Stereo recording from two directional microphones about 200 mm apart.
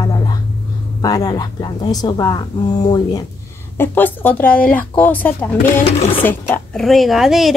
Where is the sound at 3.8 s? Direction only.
10° left (ahead or behind).